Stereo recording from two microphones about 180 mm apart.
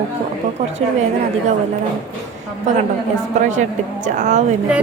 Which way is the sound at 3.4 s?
40° right (ahead or behind).